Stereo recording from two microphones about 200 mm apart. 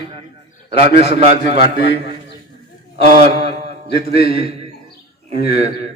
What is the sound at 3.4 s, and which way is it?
Mantra, 30° right (ahead or behind).